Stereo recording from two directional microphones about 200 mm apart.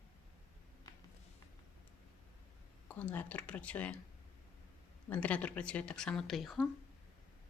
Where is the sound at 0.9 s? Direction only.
20° left (ahead or behind).